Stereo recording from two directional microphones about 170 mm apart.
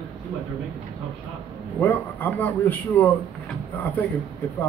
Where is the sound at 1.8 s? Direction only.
10° left (ahead or behind).